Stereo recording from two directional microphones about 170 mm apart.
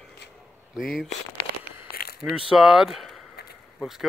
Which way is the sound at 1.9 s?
65° left (ahead or behind).